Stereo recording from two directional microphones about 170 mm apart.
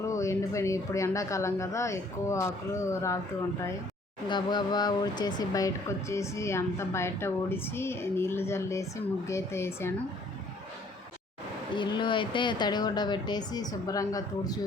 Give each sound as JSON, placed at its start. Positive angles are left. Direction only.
{"t": 0.1, "sound": "speech", "side_deg": 15}
{"t": 4.3, "sound": "speech", "side_deg": 25}
{"t": 11.7, "sound": "speech", "side_deg": 30}